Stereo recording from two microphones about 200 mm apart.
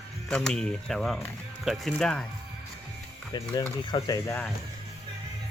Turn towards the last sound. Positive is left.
turn(degrees=20)  # may be behind; listen again after turning